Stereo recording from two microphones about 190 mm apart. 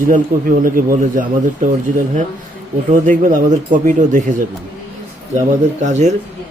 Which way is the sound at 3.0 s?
45° right (ahead or behind).